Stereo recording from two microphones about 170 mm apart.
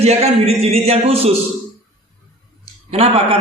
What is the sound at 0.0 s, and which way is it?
Speech, 40° right (ahead or behind).